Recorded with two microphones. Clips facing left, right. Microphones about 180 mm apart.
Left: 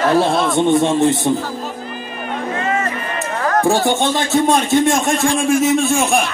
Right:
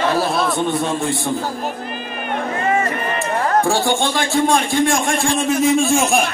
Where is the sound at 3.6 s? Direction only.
20° left (ahead or behind).